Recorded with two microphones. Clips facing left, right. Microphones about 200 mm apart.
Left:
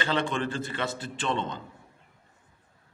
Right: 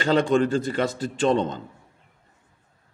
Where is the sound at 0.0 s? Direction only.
45° right (ahead or behind).